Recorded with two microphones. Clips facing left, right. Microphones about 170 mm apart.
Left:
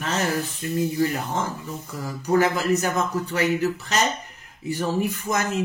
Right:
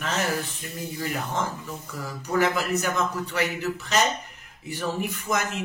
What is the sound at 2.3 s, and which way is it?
A man's voice, 40° left (ahead or behind).